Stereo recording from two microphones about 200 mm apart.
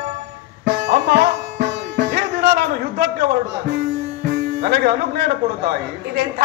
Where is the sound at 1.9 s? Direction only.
55° right (ahead or behind).